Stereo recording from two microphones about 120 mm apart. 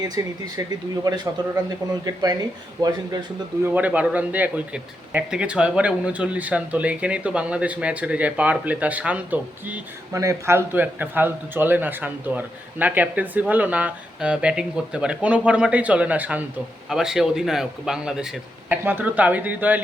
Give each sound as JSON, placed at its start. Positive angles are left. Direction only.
{"t": 0.0, "sound": "speech", "side_deg": -30}
{"t": 3.6, "sound": "speech", "side_deg": -15}
{"t": 10.1, "sound": "a man's voice", "side_deg": -25}